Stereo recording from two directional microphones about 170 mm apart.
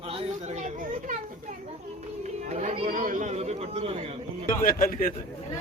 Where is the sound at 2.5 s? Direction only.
45° right (ahead or behind).